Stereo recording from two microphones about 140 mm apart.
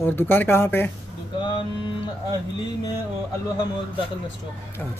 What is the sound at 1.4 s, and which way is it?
Music, 30° left (ahead or behind).